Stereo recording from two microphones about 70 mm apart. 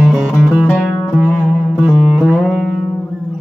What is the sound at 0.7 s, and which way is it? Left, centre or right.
Music, left.